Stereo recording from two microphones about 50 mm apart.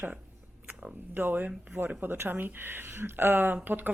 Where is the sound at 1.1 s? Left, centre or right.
Right.